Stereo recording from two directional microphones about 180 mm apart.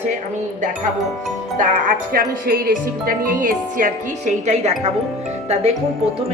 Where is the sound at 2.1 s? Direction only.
55° right (ahead or behind); by 4.7 s 40° right (ahead or behind).